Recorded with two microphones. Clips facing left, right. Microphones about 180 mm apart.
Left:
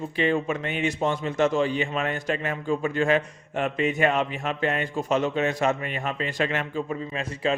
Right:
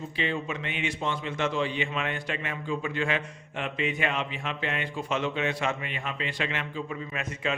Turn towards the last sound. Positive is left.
turn(degrees=30)  # may be behind; listen again after turning